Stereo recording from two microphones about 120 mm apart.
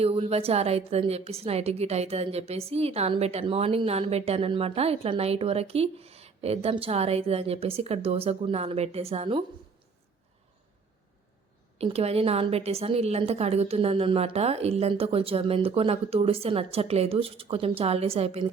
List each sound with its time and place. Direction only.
0.0 s a woman's voice: 55° right (ahead or behind)
11.8 s a woman's voice: 55° right (ahead or behind)